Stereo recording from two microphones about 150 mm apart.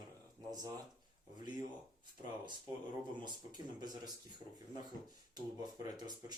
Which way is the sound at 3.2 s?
30° right (ahead or behind).